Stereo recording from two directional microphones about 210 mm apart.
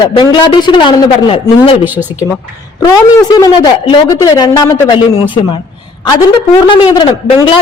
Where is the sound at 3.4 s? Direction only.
20° left (ahead or behind).